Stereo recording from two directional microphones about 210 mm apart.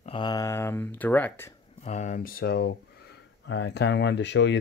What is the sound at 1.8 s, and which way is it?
Speech, 35° left (ahead or behind).